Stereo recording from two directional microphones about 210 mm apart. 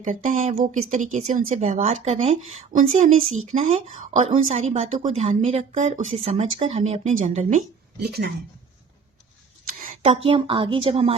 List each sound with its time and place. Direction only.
0.0 s speech: 40° right (ahead or behind)
8.0 s speech: 50° right (ahead or behind)
9.6 s speech: 40° right (ahead or behind)